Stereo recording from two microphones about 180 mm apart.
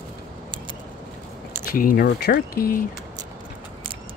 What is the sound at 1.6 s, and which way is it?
Speech, 50° left (ahead or behind).